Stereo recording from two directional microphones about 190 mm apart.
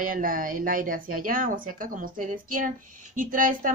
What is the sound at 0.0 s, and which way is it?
A woman's voice, 45° right (ahead or behind).